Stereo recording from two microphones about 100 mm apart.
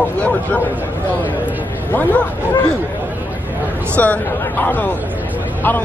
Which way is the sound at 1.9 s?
15° left (ahead or behind).